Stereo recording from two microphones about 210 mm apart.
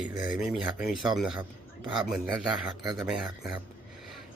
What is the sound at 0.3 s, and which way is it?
Speech, 5° right (ahead or behind).